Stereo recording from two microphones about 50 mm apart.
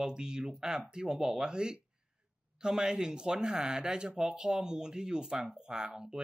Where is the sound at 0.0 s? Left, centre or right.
Centre.